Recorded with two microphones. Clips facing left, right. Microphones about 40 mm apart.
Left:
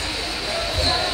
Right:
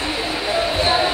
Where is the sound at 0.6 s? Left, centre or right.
Right.